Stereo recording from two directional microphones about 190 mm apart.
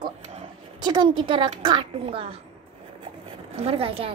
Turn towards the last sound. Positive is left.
turn(degrees=-30)  # may be behind; listen again after turning